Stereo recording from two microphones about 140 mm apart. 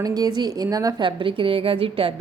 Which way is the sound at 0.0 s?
25° right (ahead or behind).